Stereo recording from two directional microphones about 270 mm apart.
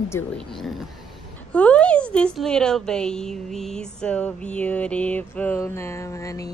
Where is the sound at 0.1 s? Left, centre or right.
Centre.